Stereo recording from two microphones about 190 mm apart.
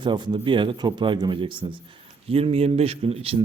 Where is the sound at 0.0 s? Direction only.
25° right (ahead or behind).